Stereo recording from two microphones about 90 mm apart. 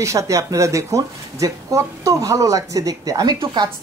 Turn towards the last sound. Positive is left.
turn(degrees=-50)  # may be behind; listen again after turning